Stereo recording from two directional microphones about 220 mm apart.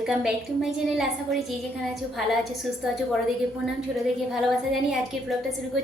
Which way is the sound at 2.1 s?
Centre (ahead or behind).